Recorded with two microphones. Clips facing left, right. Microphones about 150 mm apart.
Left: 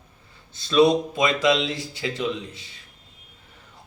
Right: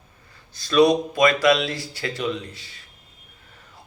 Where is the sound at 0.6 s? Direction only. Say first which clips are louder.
Right 1 dB; 25° left (ahead or behind).